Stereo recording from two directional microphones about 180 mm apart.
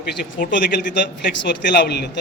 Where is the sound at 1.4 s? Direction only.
65° left (ahead or behind).